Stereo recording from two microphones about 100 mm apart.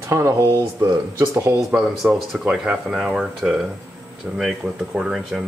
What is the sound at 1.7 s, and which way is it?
Speech, 10° right (ahead or behind).